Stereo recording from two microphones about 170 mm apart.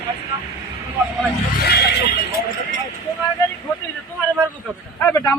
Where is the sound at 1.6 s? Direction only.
75° left (ahead or behind).